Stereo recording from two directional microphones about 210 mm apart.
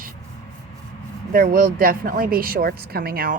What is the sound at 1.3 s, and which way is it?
A woman's voice, 40° right (ahead or behind).